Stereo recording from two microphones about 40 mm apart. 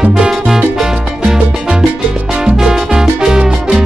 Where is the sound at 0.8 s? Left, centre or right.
Centre.